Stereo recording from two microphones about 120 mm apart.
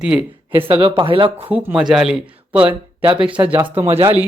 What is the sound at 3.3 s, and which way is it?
Speech, 10° right (ahead or behind).